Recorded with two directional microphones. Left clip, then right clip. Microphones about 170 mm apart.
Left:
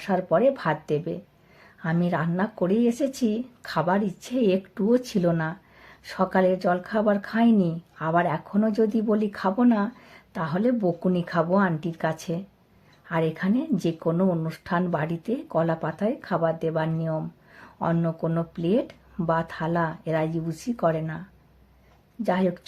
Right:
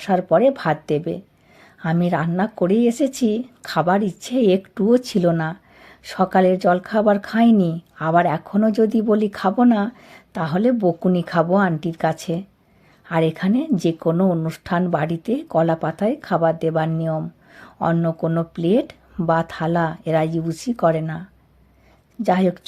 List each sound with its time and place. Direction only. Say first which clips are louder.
0.0 s speech: right 5 dB; 35° right (ahead or behind)
22.2 s speech: right 6 dB; 35° right (ahead or behind)